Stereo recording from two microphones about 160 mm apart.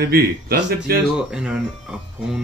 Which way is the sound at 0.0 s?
70° right (ahead or behind).